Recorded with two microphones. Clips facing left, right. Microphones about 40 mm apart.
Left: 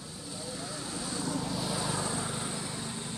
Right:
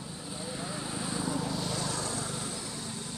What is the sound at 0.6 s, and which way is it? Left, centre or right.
Vehicle, right.